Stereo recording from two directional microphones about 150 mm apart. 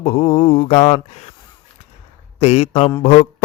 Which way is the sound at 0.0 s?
45° left (ahead or behind).